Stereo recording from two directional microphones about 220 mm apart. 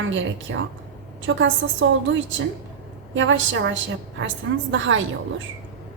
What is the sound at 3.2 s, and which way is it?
A woman's voice, 60° right (ahead or behind).